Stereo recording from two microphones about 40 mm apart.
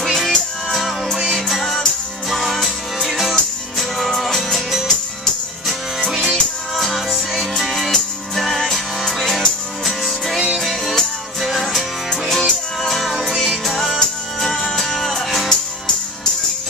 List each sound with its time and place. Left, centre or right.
0.0 s music: centre
6.1 s music: centre
6.7 s music: centre
12.1 s music: centre
12.9 s music: centre
13.7 s music: centre